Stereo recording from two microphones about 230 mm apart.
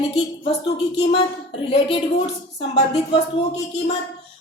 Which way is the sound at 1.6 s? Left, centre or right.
Left.